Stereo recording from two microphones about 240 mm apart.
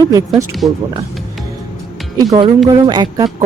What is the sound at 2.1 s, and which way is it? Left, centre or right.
Speech, centre.